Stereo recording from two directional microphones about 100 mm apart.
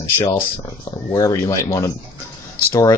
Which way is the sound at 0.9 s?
35° left (ahead or behind).